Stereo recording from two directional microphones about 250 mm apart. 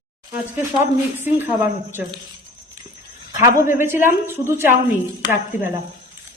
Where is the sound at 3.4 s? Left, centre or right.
Centre.